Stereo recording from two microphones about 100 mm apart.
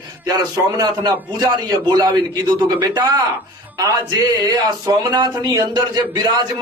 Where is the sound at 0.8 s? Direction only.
40° right (ahead or behind).